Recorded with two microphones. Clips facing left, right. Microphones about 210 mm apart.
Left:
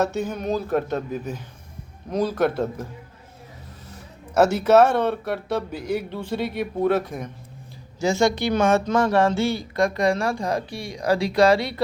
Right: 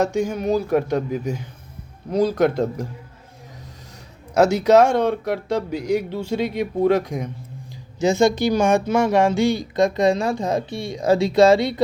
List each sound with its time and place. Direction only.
0.0 s speech: 10° right (ahead or behind)
4.4 s speech: 10° right (ahead or behind)